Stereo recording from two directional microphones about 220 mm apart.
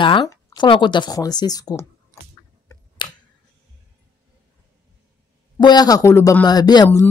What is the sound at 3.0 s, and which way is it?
Tick, 20° left (ahead or behind).